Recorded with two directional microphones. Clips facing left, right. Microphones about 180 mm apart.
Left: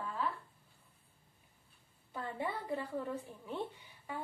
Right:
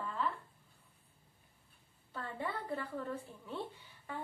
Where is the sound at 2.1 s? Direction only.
15° left (ahead or behind).